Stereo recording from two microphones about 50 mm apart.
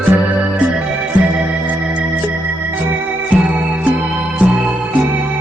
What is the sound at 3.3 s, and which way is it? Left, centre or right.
Music, right.